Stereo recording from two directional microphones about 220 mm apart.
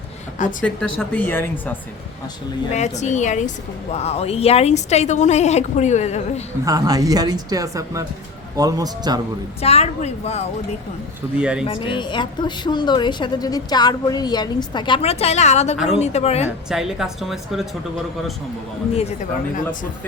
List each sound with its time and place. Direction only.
0.6 s speech: 5° left (ahead or behind)
2.7 s a woman's voice: 30° left (ahead or behind)
6.7 s a woman's voice: 15° right (ahead or behind)
9.6 s speech: 30° left (ahead or behind)
11.3 s speech: 5° right (ahead or behind)
11.6 s speech: 20° left (ahead or behind)
16.6 s speech: centre (ahead or behind)